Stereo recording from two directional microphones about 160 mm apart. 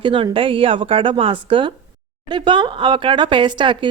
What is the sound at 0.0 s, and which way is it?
Speech, 30° right (ahead or behind).